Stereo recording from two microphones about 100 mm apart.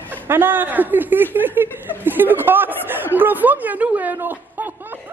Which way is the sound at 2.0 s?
20° right (ahead or behind).